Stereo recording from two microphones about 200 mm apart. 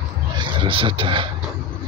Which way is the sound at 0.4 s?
25° right (ahead or behind).